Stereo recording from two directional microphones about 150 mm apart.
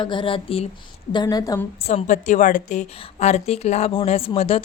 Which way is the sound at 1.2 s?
25° left (ahead or behind).